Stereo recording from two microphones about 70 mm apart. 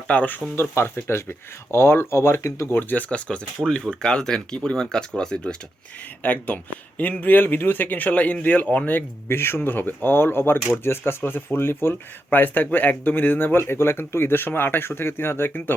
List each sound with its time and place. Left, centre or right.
0.1 s speech: left
2.9 s speech: left
6.2 s speech: left
8.9 s speech: left